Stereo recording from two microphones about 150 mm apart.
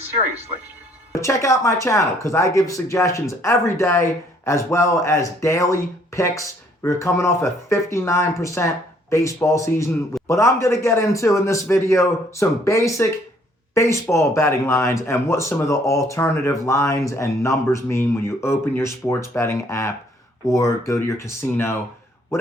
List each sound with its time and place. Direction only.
1.1 s speech: 20° left (ahead or behind)